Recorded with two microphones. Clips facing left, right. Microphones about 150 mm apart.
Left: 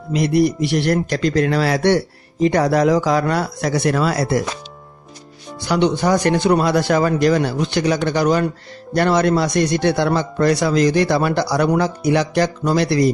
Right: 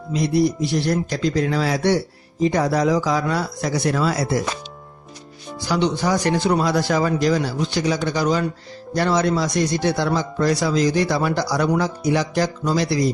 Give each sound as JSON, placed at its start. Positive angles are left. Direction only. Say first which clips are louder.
{"t": 0.2, "sound": "speech", "louder": "left 3 dB", "side_deg": 0}
{"t": 0.4, "sound": "a man's voice", "louder": "left 3 dB", "side_deg": 65}
{"t": 5.6, "sound": "a man's voice", "louder": "left 4 dB", "side_deg": 65}